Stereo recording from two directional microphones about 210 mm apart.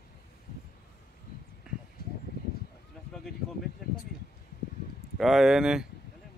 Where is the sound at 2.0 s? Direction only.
45° left (ahead or behind).